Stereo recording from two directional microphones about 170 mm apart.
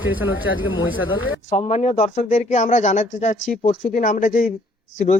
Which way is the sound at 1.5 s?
40° left (ahead or behind).